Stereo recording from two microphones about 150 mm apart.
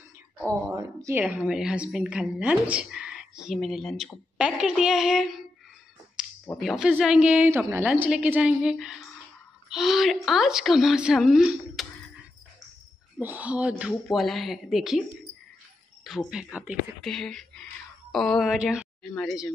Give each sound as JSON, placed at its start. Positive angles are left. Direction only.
{"t": 0.7, "sound": "a woman's voice", "side_deg": -15}
{"t": 4.4, "sound": "a sound", "side_deg": -5}
{"t": 6.6, "sound": "a woman's voice", "side_deg": -5}
{"t": 7.4, "sound": "a woman's voice", "side_deg": -15}
{"t": 13.2, "sound": "a woman's voice", "side_deg": -10}